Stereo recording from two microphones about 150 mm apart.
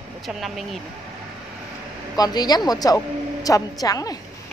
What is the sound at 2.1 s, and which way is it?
Speech, 25° left (ahead or behind).